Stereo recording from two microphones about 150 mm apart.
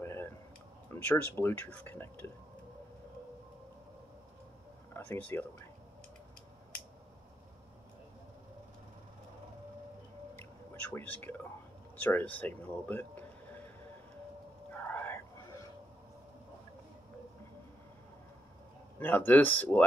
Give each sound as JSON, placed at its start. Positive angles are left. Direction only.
{"t": 0.0, "sound": "a sound", "side_deg": 15}
{"t": 0.8, "sound": "speech", "side_deg": 15}
{"t": 4.9, "sound": "speech", "side_deg": 10}
{"t": 10.3, "sound": "drip", "side_deg": 10}
{"t": 12.0, "sound": "speech", "side_deg": 10}
{"t": 14.7, "sound": "a sound", "side_deg": 15}
{"t": 18.9, "sound": "speech", "side_deg": 10}